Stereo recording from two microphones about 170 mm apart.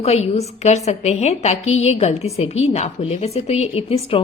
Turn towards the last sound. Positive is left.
turn(degrees=35)  # may be behind; listen again after turning